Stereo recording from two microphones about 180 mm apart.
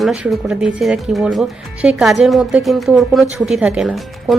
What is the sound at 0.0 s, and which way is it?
A woman's voice, centre (ahead or behind).